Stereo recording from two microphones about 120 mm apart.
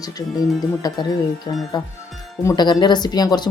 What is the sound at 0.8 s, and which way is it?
Speech, 30° left (ahead or behind).